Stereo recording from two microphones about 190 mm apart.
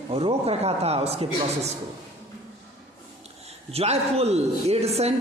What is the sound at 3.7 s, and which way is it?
A woman's voice, 30° right (ahead or behind).